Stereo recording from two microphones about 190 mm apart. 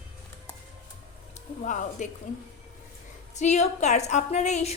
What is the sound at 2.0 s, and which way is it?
Speech, 40° left (ahead or behind).